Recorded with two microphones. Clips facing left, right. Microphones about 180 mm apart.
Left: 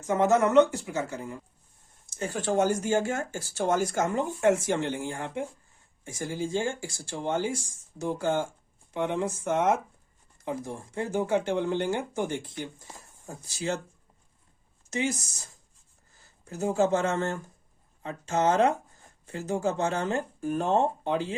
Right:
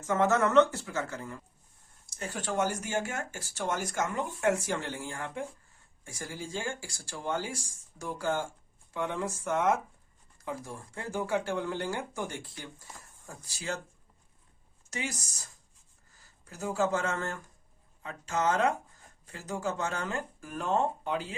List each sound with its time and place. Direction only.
0.1 s speech: 15° left (ahead or behind)
2.0 s speech: 30° left (ahead or behind)
14.8 s speech: 25° left (ahead or behind)
16.5 s speech: 25° left (ahead or behind)